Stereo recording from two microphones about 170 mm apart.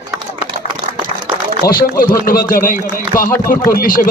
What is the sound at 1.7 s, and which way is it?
Speech, 60° left (ahead or behind).